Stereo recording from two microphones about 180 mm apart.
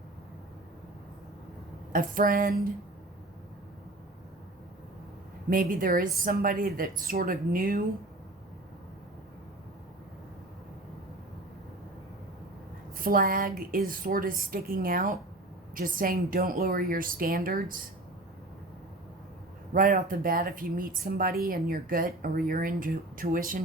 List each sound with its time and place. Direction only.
1.9 s speech: 50° right (ahead or behind)
5.5 s speech: 50° right (ahead or behind)
13.0 s speech: 55° right (ahead or behind)
19.7 s speech: 50° right (ahead or behind)